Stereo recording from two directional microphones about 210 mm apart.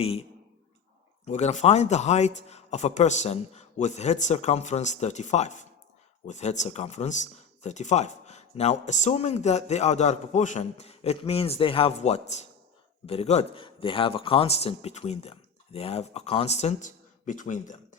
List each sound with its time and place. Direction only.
0.0 s speech: 30° left (ahead or behind)